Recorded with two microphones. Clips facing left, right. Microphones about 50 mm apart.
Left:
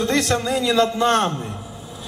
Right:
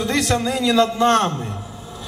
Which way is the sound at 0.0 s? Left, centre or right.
Centre.